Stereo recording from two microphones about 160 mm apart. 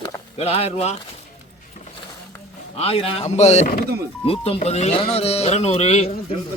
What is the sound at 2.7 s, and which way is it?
Speech, 35° left (ahead or behind).